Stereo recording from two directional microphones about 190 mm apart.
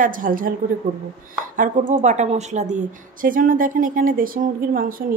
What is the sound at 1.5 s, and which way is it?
A woman's voice, 45° right (ahead or behind).